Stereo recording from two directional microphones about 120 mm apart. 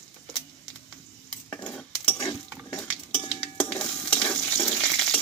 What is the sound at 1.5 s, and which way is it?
Cutlery, 10° left (ahead or behind).